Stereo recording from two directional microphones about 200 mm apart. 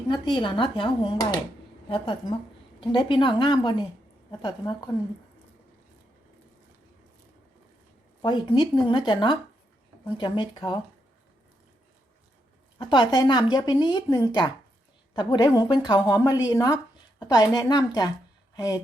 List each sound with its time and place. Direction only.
0.1 s speech: 25° left (ahead or behind)
8.2 s speech: 25° left (ahead or behind)
12.9 s speech: 20° left (ahead or behind)